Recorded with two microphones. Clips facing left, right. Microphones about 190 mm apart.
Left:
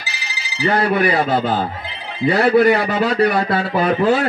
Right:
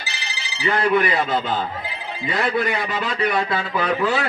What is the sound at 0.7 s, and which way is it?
A man's voice, 40° left (ahead or behind).